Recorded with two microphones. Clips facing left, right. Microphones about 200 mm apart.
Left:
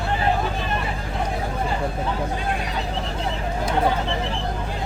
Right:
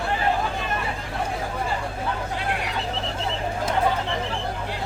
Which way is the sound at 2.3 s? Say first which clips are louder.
Left 1 dB; 75° right (ahead or behind).